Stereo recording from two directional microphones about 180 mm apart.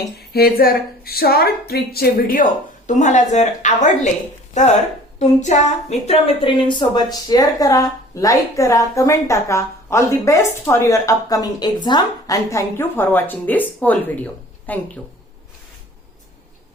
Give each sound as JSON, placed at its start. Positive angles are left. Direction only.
{"t": 0.3, "sound": "a woman's voice", "side_deg": 60}
{"t": 5.2, "sound": "a woman's voice", "side_deg": 40}